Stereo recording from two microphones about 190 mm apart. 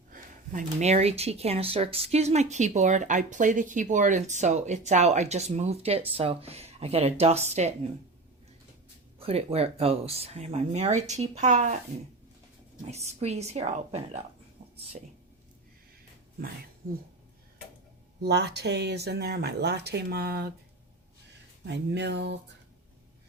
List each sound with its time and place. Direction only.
0.1 s speech: 40° right (ahead or behind)
9.1 s speech: 30° right (ahead or behind)
13.1 s speech: 35° right (ahead or behind)
18.2 s speech: 60° right (ahead or behind)
21.6 s speech: 65° right (ahead or behind)